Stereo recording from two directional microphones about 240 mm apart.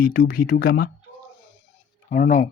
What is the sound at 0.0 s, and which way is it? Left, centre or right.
Speech, left.